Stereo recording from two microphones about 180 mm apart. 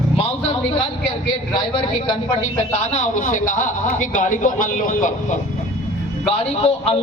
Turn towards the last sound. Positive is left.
turn(degrees=35)  # may be behind; listen again after turning